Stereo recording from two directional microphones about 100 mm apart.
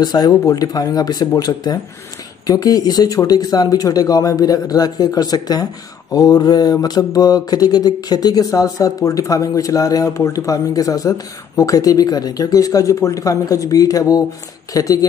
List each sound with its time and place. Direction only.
0.0 s mantra: 40° left (ahead or behind)